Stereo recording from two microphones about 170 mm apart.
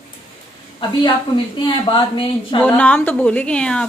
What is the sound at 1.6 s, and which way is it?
Speech, 30° left (ahead or behind).